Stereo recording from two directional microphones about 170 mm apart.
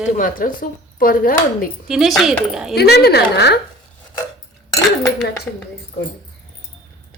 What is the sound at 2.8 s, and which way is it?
Speech, 70° left (ahead or behind).